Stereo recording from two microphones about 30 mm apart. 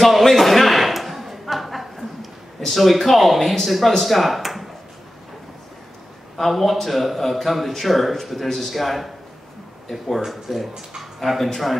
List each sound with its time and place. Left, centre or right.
0.0 s a sound: centre
2.6 s a man's voice: centre
6.5 s a man's voice: centre